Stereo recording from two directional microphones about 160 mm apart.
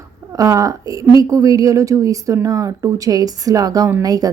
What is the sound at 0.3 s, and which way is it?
Speech, 20° right (ahead or behind).